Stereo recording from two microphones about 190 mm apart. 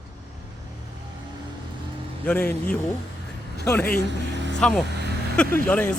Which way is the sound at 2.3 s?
10° left (ahead or behind).